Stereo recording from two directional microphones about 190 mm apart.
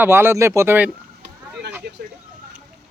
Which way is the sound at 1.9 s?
60° right (ahead or behind).